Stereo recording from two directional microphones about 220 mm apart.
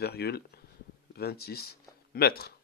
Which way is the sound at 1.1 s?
45° left (ahead or behind).